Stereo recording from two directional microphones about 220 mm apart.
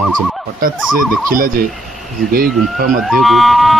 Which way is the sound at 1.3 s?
40° right (ahead or behind).